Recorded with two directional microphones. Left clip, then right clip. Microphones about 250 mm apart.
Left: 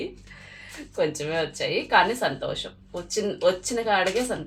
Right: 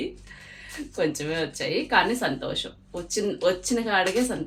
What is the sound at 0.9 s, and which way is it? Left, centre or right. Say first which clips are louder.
Speech: left 1 dB; centre.